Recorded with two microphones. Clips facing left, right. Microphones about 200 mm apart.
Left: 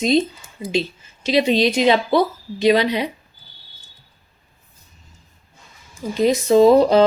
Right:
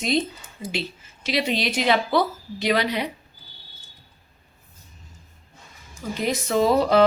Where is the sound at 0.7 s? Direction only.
20° left (ahead or behind).